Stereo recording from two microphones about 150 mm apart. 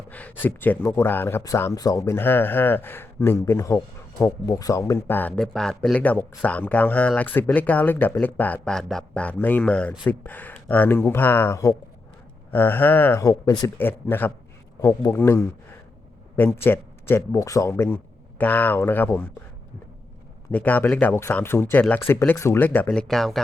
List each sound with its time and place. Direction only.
0.1 s a man's voice: 10° left (ahead or behind)
20.5 s speech: 10° left (ahead or behind)